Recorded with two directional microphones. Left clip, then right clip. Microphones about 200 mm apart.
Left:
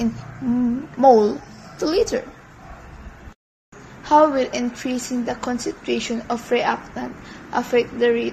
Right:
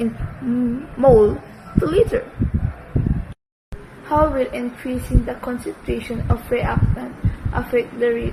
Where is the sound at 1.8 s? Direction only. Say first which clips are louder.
Right 3 dB; 35° left (ahead or behind).